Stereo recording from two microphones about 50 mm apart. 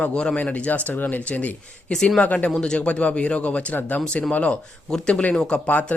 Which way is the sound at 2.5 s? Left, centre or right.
Centre.